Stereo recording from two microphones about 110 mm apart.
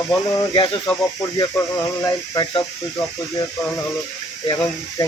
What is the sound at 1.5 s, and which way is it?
Speech, 30° left (ahead or behind).